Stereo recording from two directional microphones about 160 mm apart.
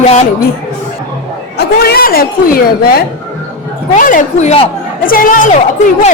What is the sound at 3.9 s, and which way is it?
Speech, 55° left (ahead or behind).